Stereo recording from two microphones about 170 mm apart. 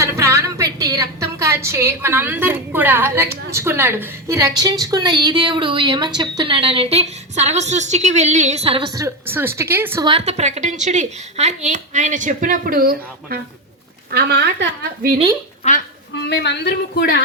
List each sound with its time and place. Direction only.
0.0 s a woman's voice: 15° right (ahead or behind); by 8.9 s 35° right (ahead or behind)
9.0 s a woman's voice: 15° right (ahead or behind)
10.0 s a woman's voice: 30° right (ahead or behind); by 15.1 s 70° right (ahead or behind)
16.2 s a man's voice: 90° left